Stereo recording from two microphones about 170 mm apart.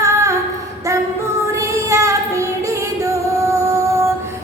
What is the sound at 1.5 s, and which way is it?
Female singing, 15° right (ahead or behind).